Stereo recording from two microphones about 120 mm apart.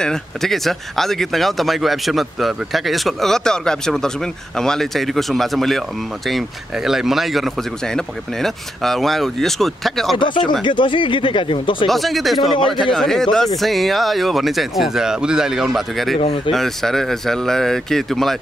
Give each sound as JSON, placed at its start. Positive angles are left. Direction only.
{"t": 0.0, "sound": "speech", "side_deg": 5}
{"t": 10.1, "sound": "speech", "side_deg": 40}
{"t": 11.9, "sound": "speech", "side_deg": 0}
{"t": 12.5, "sound": "a man's voice", "side_deg": 40}
{"t": 12.9, "sound": "speech", "side_deg": 5}